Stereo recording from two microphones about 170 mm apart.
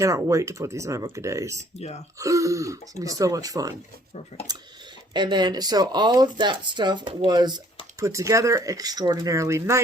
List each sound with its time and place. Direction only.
0.0 s speech: 20° right (ahead or behind)